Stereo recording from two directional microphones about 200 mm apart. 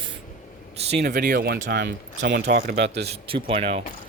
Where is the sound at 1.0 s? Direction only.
45° right (ahead or behind).